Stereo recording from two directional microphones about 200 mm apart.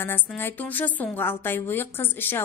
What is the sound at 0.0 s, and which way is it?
A woman's voice, 10° left (ahead or behind).